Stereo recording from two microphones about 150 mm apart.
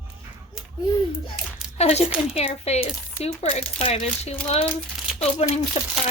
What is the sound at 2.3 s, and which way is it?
Speech, 45° left (ahead or behind).